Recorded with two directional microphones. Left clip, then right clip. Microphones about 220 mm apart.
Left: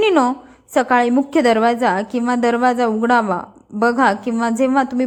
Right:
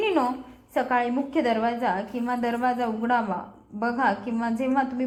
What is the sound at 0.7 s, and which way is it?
A woman's voice, 50° left (ahead or behind).